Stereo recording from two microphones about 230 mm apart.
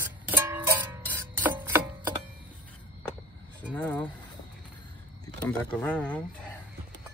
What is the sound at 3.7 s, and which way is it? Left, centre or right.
Speech, centre.